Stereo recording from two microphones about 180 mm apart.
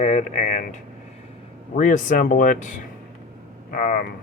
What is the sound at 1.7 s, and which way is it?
Speech, 45° left (ahead or behind).